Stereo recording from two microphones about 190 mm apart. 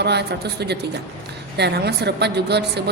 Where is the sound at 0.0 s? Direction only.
60° right (ahead or behind).